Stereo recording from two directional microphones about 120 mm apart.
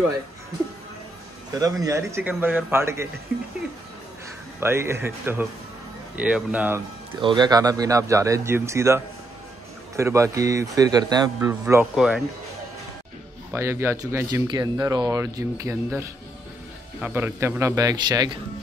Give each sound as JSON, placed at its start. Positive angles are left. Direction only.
{"t": 1.5, "sound": "speech", "side_deg": -30}
{"t": 4.6, "sound": "speech", "side_deg": -20}
{"t": 7.2, "sound": "speech", "side_deg": -40}
{"t": 11.8, "sound": "speech", "side_deg": -5}
{"t": 13.5, "sound": "speech", "side_deg": -20}
{"t": 14.5, "sound": "speech", "side_deg": -35}